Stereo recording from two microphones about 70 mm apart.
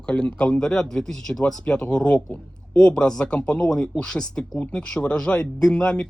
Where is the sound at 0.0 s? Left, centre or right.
Centre.